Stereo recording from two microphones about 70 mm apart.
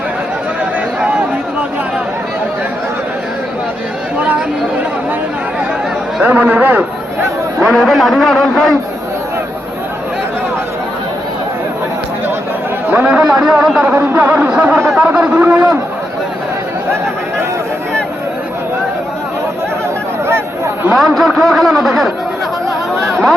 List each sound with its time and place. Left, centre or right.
0.6 s a sound: centre
6.2 s a sound: right
7.7 s a man's voice: centre
13.1 s speech: centre
13.8 s speech: right
20.9 s a man's voice: centre